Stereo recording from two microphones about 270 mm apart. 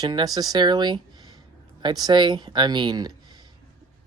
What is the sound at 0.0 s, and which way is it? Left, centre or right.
Speech, centre.